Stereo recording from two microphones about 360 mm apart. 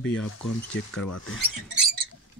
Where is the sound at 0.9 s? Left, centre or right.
Left.